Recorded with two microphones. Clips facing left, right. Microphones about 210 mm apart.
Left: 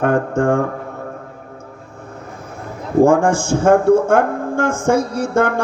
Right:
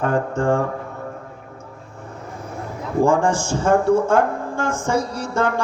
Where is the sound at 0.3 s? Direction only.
45° left (ahead or behind).